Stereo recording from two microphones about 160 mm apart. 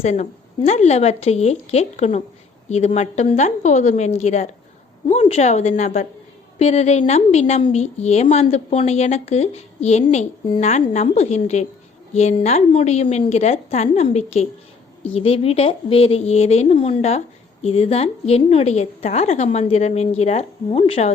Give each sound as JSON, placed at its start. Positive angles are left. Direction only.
{"t": 0.0, "sound": "a woman's voice", "side_deg": 45}